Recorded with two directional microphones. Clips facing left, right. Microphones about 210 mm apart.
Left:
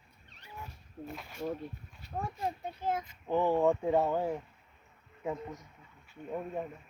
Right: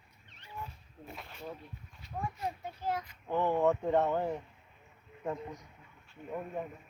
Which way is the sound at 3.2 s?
10° left (ahead or behind).